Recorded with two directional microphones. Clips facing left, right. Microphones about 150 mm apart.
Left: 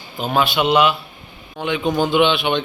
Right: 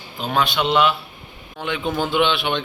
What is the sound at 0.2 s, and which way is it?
A man's voice, 5° left (ahead or behind).